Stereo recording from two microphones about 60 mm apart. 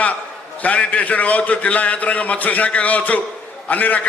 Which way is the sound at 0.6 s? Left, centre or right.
Left.